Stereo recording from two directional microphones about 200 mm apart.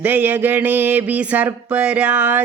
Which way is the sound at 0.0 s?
10° right (ahead or behind).